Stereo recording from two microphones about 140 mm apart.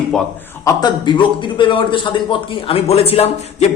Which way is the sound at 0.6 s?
30° left (ahead or behind).